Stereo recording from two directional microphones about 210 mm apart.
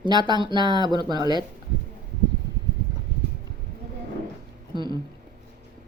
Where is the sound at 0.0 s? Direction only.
20° right (ahead or behind).